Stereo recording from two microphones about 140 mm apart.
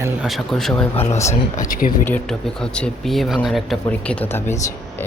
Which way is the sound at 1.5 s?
75° left (ahead or behind).